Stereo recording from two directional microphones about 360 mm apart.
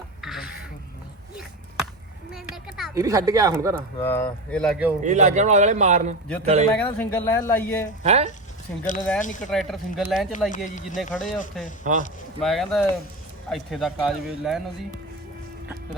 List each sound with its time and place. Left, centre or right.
0.2 s a sound: centre
2.3 s a sound: centre
3.8 s speech: centre
5.0 s speech: centre
6.7 s speech: centre
8.0 s speech: centre
9.0 s speech: centre
9.2 s speech: left
9.5 s speech: centre
10.5 s speech: left
11.8 s speech: right
12.4 s speech: centre